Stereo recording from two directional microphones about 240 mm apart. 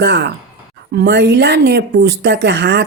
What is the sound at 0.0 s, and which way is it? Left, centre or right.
Speech, right.